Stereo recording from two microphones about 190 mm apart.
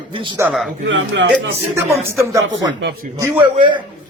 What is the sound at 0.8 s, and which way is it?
Speech, 85° right.